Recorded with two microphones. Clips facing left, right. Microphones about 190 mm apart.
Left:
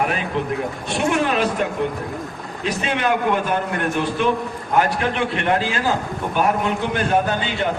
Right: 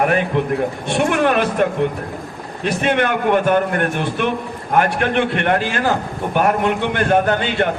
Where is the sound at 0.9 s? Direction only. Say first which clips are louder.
Right 3 dB; 60° right (ahead or behind).